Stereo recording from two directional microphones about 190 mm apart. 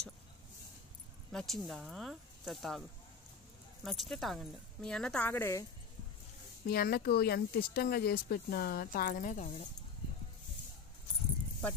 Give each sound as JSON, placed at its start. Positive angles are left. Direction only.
{"t": 1.3, "sound": "speech", "side_deg": 0}
{"t": 3.8, "sound": "speech", "side_deg": 0}
{"t": 6.7, "sound": "speech", "side_deg": 55}